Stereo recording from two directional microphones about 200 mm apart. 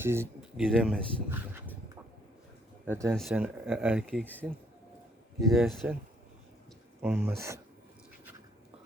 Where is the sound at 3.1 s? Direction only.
Centre (ahead or behind).